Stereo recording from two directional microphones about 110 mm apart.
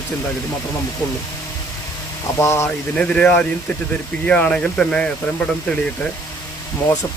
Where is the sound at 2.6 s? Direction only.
10° left (ahead or behind).